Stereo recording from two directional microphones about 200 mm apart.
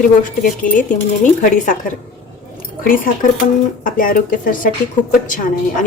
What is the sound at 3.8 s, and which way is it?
A woman's voice, 45° left (ahead or behind).